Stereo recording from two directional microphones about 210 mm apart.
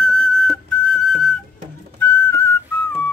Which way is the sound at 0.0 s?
5° left (ahead or behind).